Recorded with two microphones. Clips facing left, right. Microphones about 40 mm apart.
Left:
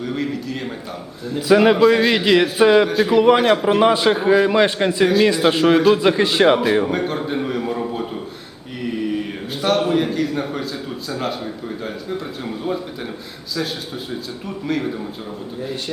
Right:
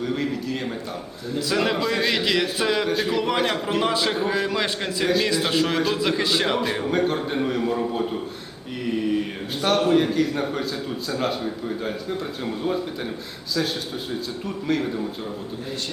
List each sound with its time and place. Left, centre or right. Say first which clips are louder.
0.0 s a man's voice: left 1 dB; centre
1.4 s speech: left 9 dB; left
1.8 s a man's voice: left 8 dB; centre
2.9 s a man's voice: left 6 dB; centre
3.2 s a man's voice: left 9 dB; centre
6.9 s a man's voice: left 1 dB; centre